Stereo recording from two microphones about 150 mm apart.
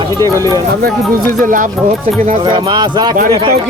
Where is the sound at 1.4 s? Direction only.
60° right (ahead or behind).